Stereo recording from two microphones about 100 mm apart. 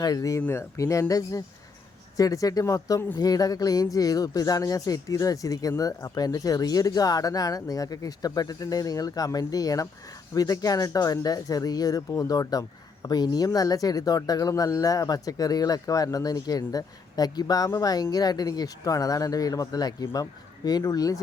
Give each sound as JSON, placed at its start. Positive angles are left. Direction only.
{"t": 0.0, "sound": "speech", "side_deg": 35}